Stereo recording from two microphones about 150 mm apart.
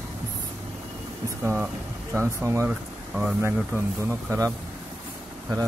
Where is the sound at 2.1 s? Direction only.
20° right (ahead or behind).